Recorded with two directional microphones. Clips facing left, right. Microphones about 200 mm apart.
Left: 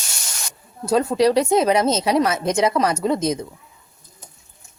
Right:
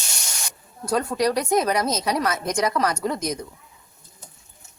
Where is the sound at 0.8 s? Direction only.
25° left (ahead or behind).